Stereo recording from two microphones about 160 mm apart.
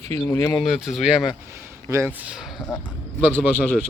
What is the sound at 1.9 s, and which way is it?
Speech, 15° right (ahead or behind).